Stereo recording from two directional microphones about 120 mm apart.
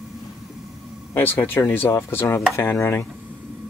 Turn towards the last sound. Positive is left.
turn(degrees=20)  # may be behind; listen again after turning